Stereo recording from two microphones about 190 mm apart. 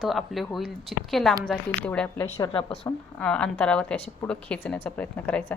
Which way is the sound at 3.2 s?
5° left (ahead or behind).